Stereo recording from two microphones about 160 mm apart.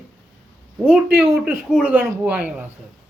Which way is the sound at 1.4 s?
5° right (ahead or behind).